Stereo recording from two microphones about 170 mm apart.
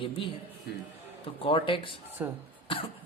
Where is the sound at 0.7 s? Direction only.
70° left (ahead or behind).